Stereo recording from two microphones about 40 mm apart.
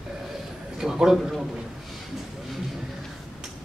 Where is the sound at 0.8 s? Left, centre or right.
Centre.